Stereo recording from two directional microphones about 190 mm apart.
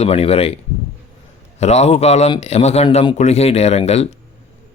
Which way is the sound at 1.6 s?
35° left (ahead or behind).